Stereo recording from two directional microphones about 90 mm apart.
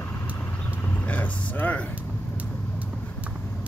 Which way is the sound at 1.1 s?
15° left (ahead or behind).